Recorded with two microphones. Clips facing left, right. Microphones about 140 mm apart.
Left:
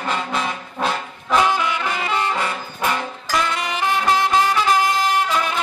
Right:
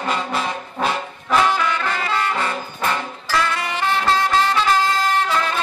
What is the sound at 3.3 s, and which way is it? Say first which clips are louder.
Music: right 1 dB; 20° left (ahead or behind).